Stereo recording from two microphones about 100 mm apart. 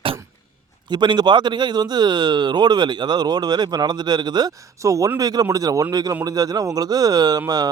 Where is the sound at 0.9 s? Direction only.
45° right (ahead or behind).